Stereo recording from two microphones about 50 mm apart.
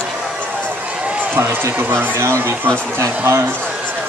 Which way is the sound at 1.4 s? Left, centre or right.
Right.